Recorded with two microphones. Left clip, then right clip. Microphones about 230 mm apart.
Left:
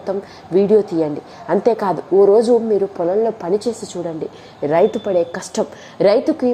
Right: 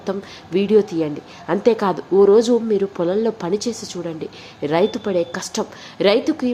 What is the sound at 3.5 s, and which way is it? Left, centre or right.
A woman's voice, centre.